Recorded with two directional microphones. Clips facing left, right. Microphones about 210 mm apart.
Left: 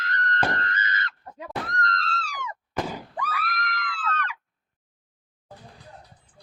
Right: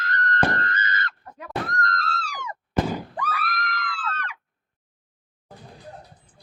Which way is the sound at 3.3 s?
35° right (ahead or behind).